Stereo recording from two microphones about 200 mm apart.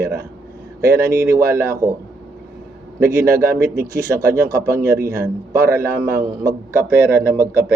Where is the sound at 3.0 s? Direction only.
15° right (ahead or behind).